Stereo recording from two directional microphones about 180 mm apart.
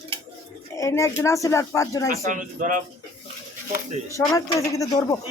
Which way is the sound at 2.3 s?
45° right (ahead or behind).